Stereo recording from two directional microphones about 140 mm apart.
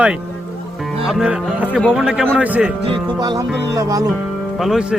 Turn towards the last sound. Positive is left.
turn(degrees=0)  # may be behind; listen again after turning